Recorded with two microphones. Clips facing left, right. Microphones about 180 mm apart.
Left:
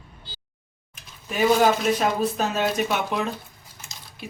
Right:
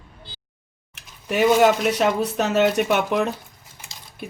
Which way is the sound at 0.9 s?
75° right (ahead or behind).